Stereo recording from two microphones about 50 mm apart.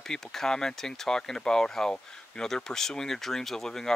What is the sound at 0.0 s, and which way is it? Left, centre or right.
Speech, centre.